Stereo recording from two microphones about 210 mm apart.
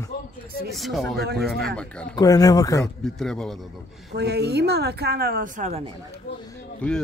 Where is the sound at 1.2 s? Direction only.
50° right (ahead or behind).